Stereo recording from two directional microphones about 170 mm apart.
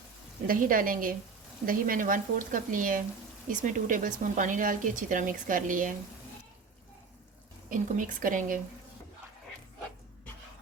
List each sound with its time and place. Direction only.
0.4 s a woman's voice: 55° right (ahead or behind)
7.7 s speech: 55° right (ahead or behind)